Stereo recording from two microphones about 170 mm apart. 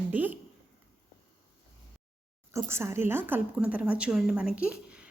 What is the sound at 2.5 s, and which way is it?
A woman's voice, 15° right (ahead or behind).